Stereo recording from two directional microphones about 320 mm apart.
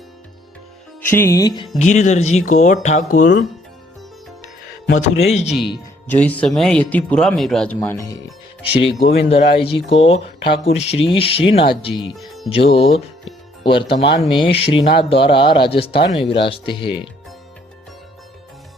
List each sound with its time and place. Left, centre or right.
1.0 s speech: centre
1.8 s speech: left
5.2 s speech: centre
5.5 s speech: centre
9.0 s speech: centre
12.1 s speech: centre
12.5 s speech: centre